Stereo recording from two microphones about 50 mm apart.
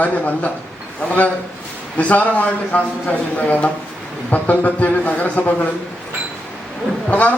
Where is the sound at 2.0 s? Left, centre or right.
Left.